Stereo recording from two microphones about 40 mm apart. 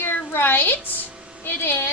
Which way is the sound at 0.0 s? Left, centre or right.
Left.